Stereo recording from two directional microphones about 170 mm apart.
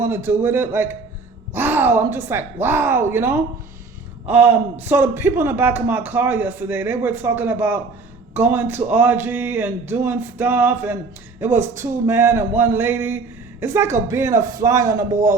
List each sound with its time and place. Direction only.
0.0 s a man's voice: 15° right (ahead or behind)